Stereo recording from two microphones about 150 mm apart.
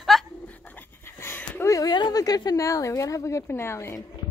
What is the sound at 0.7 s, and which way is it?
Pant, 15° left (ahead or behind).